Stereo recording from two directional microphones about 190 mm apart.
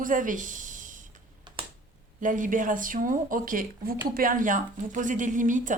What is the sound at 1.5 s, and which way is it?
Computer keyboard, 25° right (ahead or behind).